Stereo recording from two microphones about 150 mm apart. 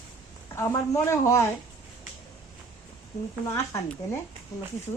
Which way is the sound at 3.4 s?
20° left (ahead or behind).